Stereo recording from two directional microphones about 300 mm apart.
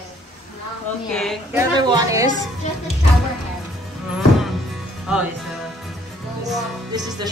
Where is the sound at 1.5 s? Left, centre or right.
Centre.